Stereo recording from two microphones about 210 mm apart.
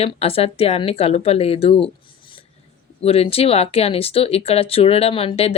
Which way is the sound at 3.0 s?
30° left (ahead or behind).